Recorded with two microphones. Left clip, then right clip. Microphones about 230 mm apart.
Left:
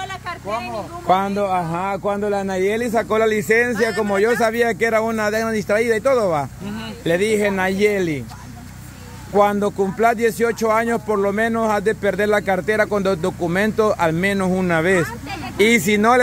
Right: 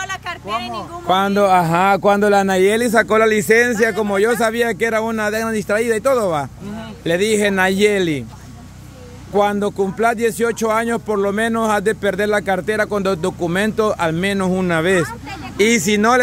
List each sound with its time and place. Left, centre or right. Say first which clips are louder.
1.3 s a man's voice: right 7 dB; right
9.3 s speech: even; centre